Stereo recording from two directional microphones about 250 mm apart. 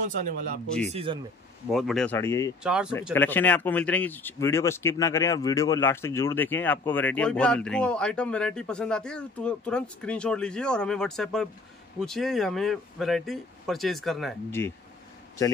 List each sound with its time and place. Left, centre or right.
0.8 s speech: right
1.7 s speech: centre
2.6 s speech: centre
3.0 s speech: centre